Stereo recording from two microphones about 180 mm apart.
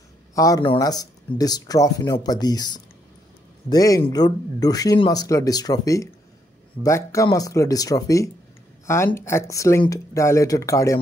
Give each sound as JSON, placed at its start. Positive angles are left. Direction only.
{"t": 0.3, "sound": "speech", "side_deg": 20}